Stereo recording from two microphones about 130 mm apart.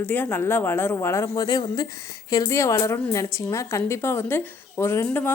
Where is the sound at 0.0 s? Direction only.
15° left (ahead or behind).